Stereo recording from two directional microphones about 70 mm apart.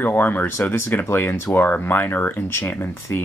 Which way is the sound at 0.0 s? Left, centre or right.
Left.